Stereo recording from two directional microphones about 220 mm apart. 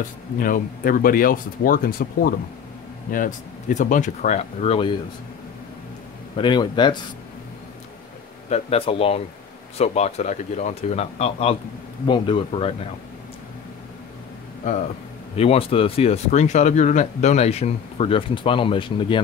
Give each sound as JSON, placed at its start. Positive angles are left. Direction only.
{"t": 0.4, "sound": "speech", "side_deg": 40}
{"t": 6.3, "sound": "speech", "side_deg": 20}
{"t": 8.5, "sound": "speech", "side_deg": 30}
{"t": 15.3, "sound": "speech", "side_deg": 25}